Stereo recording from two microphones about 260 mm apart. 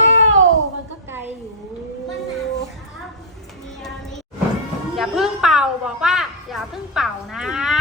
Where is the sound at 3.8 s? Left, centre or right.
Centre.